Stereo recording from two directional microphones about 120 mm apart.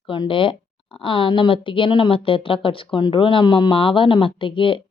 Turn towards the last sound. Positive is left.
turn(degrees=45)  # may be behind; listen again after turning